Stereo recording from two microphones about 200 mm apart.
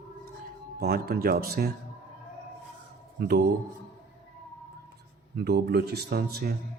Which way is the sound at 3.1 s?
55° right (ahead or behind).